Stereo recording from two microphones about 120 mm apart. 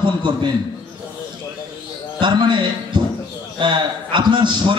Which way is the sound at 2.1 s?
40° right (ahead or behind).